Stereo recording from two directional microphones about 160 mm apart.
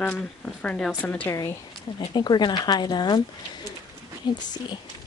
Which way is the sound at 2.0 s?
30° left (ahead or behind).